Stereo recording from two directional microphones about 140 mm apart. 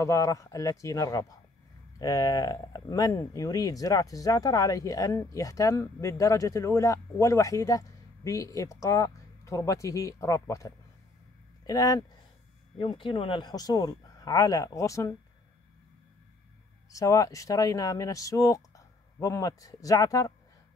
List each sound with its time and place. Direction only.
0.0 s speech: 25° left (ahead or behind)
12.7 s speech: 35° left (ahead or behind)
16.9 s speech: 25° left (ahead or behind)